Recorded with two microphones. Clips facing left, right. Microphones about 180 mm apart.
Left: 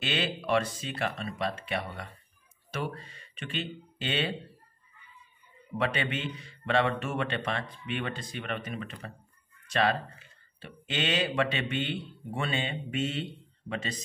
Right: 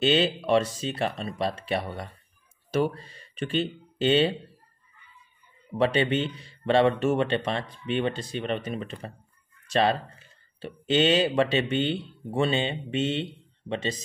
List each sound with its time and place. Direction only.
0.0 s speech: 30° right (ahead or behind)
5.8 s speech: 30° right (ahead or behind)